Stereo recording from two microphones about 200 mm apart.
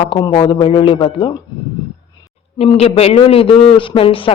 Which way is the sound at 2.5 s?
30° left (ahead or behind).